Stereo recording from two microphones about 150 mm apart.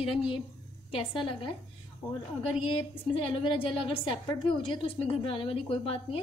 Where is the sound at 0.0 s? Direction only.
35° left (ahead or behind).